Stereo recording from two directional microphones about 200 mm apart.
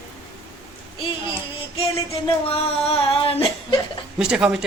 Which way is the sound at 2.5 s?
30° left (ahead or behind).